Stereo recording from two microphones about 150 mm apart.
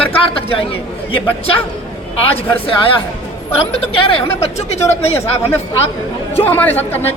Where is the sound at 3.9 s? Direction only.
40° left (ahead or behind).